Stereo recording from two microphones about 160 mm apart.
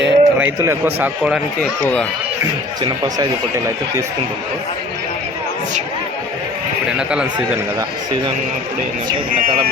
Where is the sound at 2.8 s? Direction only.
25° right (ahead or behind).